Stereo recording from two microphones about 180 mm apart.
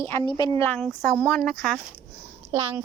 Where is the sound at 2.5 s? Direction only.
30° right (ahead or behind).